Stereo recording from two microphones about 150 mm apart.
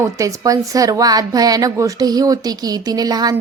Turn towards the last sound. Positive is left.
turn(degrees=-25)  # may be behind; listen again after turning